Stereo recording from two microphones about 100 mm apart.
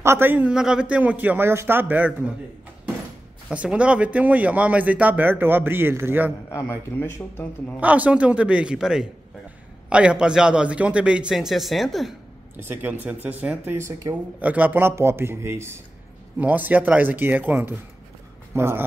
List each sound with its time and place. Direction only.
0.0 s a man's voice: 25° right (ahead or behind)
0.5 s speech: 10° right (ahead or behind)
3.4 s speech: 10° right (ahead or behind)
6.5 s speech: 25° left (ahead or behind)
7.8 s speech: 15° right (ahead or behind)
12.5 s speech: 20° right (ahead or behind)
14.0 s speech: 35° right (ahead or behind)
14.4 s a man's voice: 15° right (ahead or behind)
16.3 s a man's voice: 15° right (ahead or behind)